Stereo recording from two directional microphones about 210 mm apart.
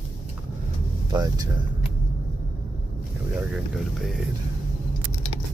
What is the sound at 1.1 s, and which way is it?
Speech, 20° right (ahead or behind).